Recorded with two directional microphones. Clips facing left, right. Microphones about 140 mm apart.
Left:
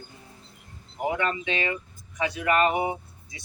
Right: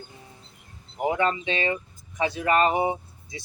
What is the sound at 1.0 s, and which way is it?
Speech, 30° right (ahead or behind).